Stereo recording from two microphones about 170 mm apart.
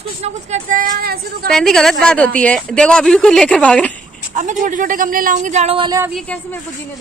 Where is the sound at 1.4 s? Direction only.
5° left (ahead or behind).